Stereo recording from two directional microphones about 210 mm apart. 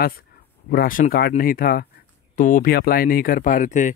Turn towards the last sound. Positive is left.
turn(degrees=35)  # may be behind; listen again after turning